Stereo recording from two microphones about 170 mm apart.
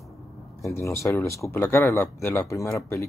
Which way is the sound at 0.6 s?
15° left (ahead or behind).